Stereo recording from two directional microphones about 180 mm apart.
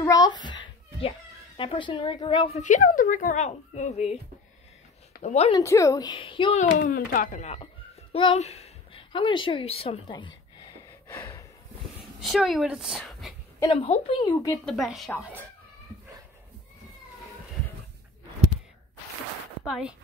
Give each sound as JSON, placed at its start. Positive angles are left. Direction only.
{"t": 0.0, "sound": "a sound", "side_deg": 20}
{"t": 1.6, "sound": "a woman's voice", "side_deg": 30}
{"t": 2.6, "sound": "a woman's voice", "side_deg": 45}
{"t": 5.2, "sound": "a woman's voice", "side_deg": 40}
{"t": 5.5, "sound": "a woman's voice", "side_deg": 15}
{"t": 6.8, "sound": "a woman's voice", "side_deg": 55}
{"t": 8.1, "sound": "a woman's voice", "side_deg": 30}
{"t": 11.1, "sound": "a sound", "side_deg": 10}
{"t": 12.2, "sound": "speech", "side_deg": 0}
{"t": 13.7, "sound": "a woman's voice", "side_deg": 35}
{"t": 14.2, "sound": "a woman's voice", "side_deg": 20}
{"t": 14.6, "sound": "speech", "side_deg": 0}
{"t": 19.6, "sound": "speech", "side_deg": -5}